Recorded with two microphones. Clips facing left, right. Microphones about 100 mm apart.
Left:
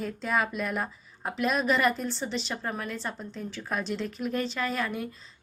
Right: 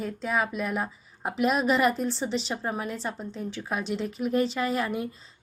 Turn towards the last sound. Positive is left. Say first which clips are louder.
# right 3 dB
turn(degrees=-20)  # may be behind; listen again after turning